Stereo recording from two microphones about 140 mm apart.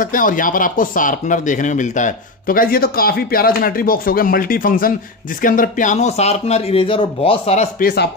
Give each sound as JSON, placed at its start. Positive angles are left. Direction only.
{"t": 0.0, "sound": "speech", "side_deg": 75}
{"t": 5.4, "sound": "speech", "side_deg": 75}